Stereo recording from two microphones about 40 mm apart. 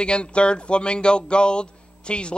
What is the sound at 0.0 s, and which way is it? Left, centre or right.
Speech, left.